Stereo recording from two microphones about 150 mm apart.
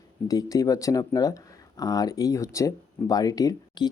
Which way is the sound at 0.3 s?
25° left (ahead or behind).